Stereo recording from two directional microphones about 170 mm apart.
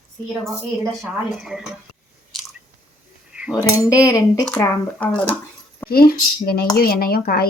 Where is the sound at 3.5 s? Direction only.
20° left (ahead or behind).